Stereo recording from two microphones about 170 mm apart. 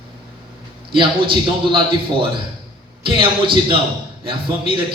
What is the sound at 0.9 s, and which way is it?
Speech, 30° right (ahead or behind).